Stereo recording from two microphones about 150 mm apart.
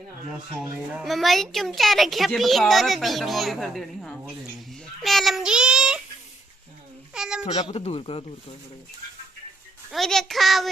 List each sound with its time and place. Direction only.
0.9 s a woman's voice: centre (ahead or behind)
7.1 s a sound: 5° right (ahead or behind)
7.7 s speech: 45° left (ahead or behind)
9.9 s a woman's voice: centre (ahead or behind)